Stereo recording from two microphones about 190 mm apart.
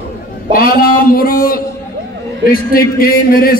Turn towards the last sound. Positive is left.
turn(degrees=50)  # may be behind; listen again after turning